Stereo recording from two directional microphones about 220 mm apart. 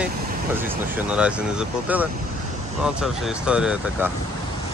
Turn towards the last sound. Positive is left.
turn(degrees=-5)  # may be behind; listen again after turning